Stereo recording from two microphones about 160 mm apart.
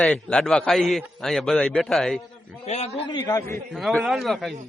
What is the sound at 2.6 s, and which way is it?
Speech, 40° left (ahead or behind).